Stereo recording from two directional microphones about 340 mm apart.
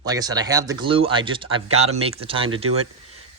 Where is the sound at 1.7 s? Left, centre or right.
Right.